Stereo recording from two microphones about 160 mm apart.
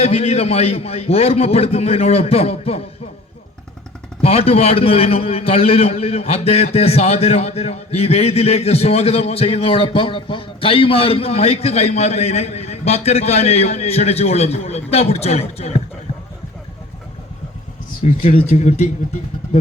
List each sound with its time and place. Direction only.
0.0 s a man's voice: 40° left (ahead or behind)
4.2 s a man's voice: 40° left (ahead or behind)
18.2 s speech: 55° left (ahead or behind)